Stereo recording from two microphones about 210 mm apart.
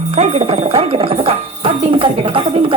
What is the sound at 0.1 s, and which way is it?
Music, 30° right (ahead or behind).